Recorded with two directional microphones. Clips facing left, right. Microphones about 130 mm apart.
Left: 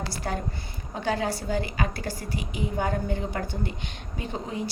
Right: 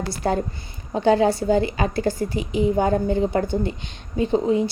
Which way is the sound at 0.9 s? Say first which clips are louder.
Right 10 dB; 25° right (ahead or behind).